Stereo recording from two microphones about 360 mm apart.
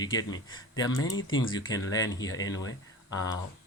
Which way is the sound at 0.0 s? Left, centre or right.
Centre.